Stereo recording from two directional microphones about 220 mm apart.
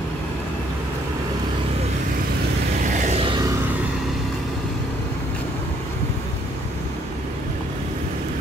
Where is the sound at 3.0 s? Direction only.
30° right (ahead or behind).